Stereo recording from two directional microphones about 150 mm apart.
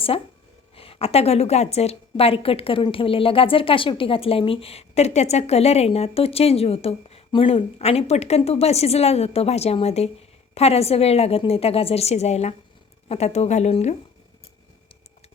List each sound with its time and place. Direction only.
0.8 s a woman's voice: 40° left (ahead or behind)